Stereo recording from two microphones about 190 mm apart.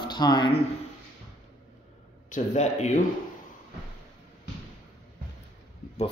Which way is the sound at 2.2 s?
40° left (ahead or behind).